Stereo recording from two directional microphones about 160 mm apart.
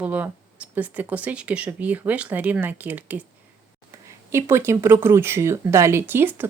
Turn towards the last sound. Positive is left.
turn(degrees=-15)  # may be behind; listen again after turning